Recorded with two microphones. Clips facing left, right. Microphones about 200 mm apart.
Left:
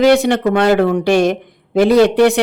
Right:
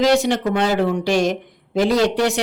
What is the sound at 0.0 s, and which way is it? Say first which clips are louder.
Speech: left 5 dB; 60° left (ahead or behind).